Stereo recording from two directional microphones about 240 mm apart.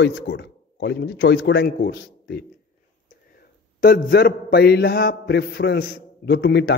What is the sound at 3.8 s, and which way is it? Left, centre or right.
A man's voice, left.